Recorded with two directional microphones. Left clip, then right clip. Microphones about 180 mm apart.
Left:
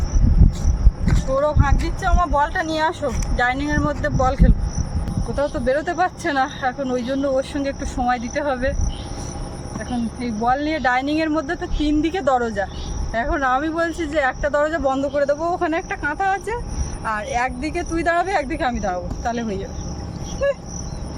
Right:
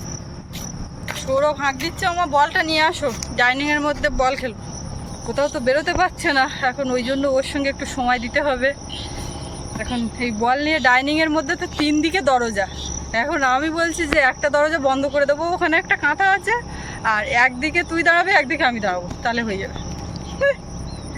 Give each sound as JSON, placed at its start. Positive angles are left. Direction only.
{"t": 1.4, "sound": "speech", "side_deg": 10}
{"t": 9.7, "sound": "speech", "side_deg": 5}